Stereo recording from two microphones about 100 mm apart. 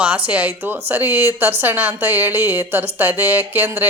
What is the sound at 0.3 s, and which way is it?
A woman's voice, 15° right (ahead or behind).